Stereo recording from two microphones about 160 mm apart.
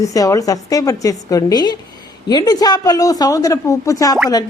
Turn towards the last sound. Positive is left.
turn(degrees=20)  # may be behind; listen again after turning